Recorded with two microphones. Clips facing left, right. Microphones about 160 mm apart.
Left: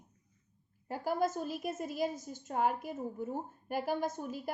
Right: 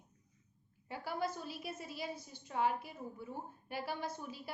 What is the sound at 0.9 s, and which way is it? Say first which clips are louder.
A woman's voice: left 7 dB; 45° left (ahead or behind).